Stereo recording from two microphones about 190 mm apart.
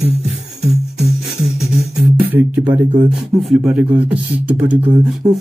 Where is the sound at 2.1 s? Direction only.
10° right (ahead or behind).